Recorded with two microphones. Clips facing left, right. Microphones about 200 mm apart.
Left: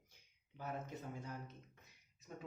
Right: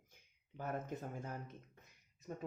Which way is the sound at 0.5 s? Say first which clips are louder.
Right 4 dB; 50° right (ahead or behind).